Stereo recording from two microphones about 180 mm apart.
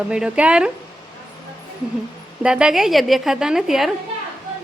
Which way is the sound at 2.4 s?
5° right (ahead or behind).